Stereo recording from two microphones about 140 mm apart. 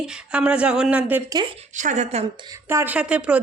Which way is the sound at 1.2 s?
30° right (ahead or behind).